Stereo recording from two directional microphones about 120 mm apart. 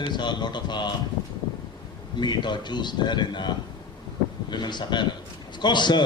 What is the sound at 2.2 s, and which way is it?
Speech, 40° left (ahead or behind).